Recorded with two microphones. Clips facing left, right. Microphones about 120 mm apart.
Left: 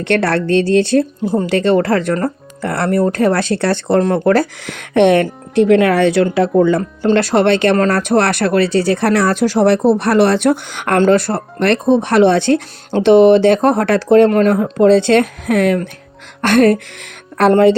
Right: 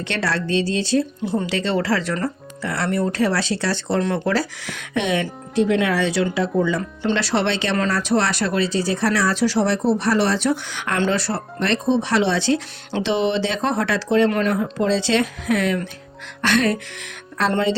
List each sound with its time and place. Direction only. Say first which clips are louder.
0.0 s speech: left 9 dB; 55° left (ahead or behind)
1.3 s speech: left 10 dB; 45° left (ahead or behind)